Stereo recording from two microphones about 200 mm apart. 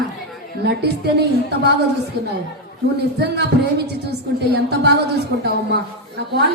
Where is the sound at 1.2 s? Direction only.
55° right (ahead or behind).